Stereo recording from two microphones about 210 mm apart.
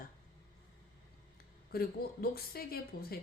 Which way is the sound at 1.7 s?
45° left (ahead or behind).